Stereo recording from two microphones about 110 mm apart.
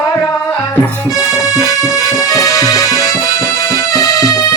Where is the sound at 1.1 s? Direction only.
30° left (ahead or behind).